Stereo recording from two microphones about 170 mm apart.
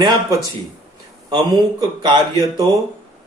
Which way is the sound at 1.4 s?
25° right (ahead or behind).